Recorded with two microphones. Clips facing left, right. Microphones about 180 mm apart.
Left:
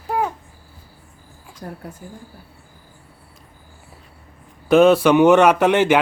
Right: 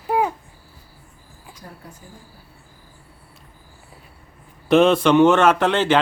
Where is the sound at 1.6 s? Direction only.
50° left (ahead or behind).